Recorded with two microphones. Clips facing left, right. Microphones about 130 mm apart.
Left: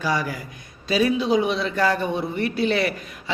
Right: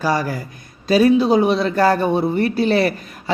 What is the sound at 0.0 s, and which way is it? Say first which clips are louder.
A man's voice: right 5 dB; 40° right (ahead or behind).